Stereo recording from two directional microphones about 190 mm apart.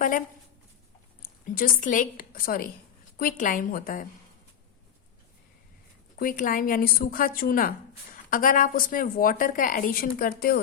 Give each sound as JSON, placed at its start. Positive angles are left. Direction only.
{"t": 1.2, "sound": "a woman's voice", "side_deg": 50}
{"t": 6.1, "sound": "a woman's voice", "side_deg": 45}